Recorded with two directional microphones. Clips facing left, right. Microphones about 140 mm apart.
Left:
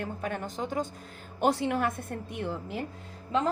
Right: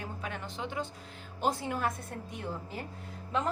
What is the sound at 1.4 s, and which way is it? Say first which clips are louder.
Speech: left 5 dB; 75° left (ahead or behind).